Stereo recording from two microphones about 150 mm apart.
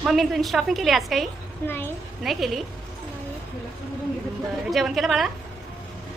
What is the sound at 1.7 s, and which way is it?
Speech, 15° left (ahead or behind).